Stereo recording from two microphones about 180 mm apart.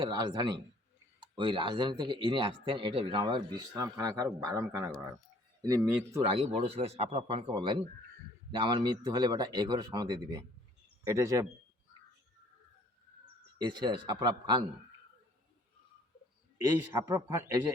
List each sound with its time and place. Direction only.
0.0 s speech: 25° right (ahead or behind)
6.3 s speech: 35° right (ahead or behind); by 11.4 s 15° right (ahead or behind)
13.6 s speech: 25° right (ahead or behind)
16.6 s speech: 15° right (ahead or behind)